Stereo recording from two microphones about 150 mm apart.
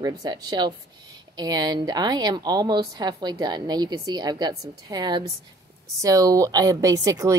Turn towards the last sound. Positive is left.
turn(degrees=-20)  # may be behind; listen again after turning